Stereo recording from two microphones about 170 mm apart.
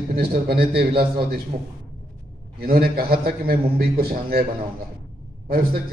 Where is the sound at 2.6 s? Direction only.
65° right (ahead or behind).